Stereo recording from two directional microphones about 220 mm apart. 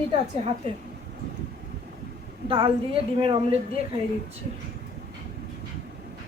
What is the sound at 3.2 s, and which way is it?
Speech, 25° right (ahead or behind).